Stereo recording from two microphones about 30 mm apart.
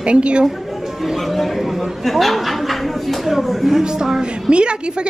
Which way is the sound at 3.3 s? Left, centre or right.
Centre.